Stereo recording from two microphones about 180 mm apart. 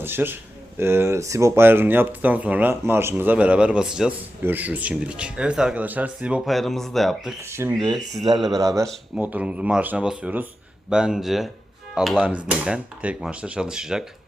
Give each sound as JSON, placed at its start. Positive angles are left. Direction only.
{"t": 0.0, "sound": "speech", "side_deg": -10}
{"t": 7.5, "sound": "speech", "side_deg": -15}
{"t": 7.9, "sound": "speech", "side_deg": 0}
{"t": 8.5, "sound": "speech", "side_deg": -20}
{"t": 8.9, "sound": "speech", "side_deg": -5}